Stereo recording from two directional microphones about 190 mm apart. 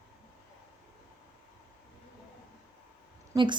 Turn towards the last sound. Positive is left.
turn(degrees=-15)  # may be behind; listen again after turning